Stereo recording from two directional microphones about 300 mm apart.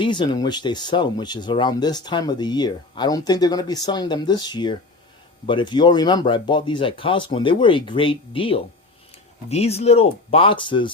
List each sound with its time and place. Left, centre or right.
0.0 s speech: centre